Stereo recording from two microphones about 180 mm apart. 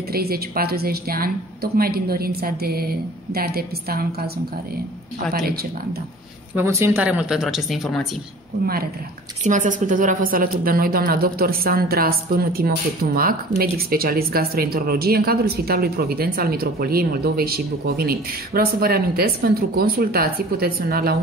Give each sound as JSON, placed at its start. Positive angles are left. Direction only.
{"t": 0.1, "sound": "a woman's voice", "side_deg": -60}
{"t": 6.5, "sound": "speech", "side_deg": -15}
{"t": 9.4, "sound": "a woman's voice", "side_deg": -45}